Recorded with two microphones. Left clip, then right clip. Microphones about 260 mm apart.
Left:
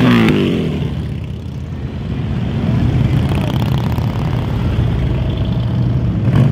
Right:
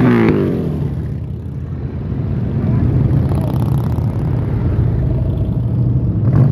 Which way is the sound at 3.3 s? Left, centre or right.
Left.